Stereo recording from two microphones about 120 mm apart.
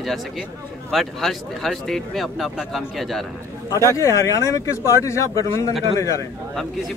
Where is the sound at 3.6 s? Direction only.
25° left (ahead or behind).